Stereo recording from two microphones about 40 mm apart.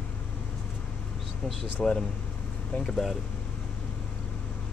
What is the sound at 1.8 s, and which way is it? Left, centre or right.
Speech, centre.